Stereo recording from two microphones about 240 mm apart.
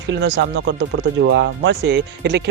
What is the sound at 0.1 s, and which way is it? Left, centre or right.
Speech, right.